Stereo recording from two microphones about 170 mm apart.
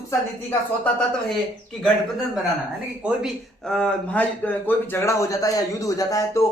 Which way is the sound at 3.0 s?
5° right (ahead or behind).